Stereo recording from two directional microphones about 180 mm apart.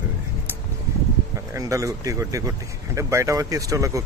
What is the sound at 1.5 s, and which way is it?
Speech, 20° right (ahead or behind).